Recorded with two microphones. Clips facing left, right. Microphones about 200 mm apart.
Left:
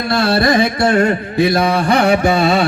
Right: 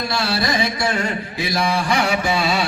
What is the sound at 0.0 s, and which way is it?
Carnatic music, 55° left (ahead or behind).